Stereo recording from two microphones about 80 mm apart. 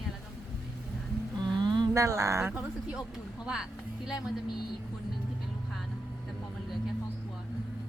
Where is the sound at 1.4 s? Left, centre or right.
Right.